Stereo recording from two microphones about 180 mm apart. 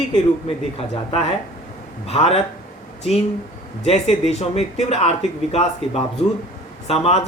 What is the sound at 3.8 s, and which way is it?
Speech, 35° left (ahead or behind).